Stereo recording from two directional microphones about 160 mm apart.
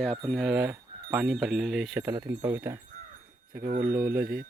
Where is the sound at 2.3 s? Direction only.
10° right (ahead or behind).